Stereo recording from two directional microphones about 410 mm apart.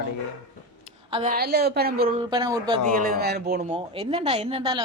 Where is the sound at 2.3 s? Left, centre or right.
Centre.